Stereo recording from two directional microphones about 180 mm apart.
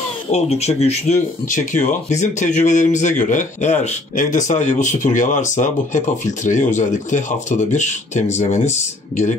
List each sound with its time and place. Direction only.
0.3 s speech: 35° left (ahead or behind)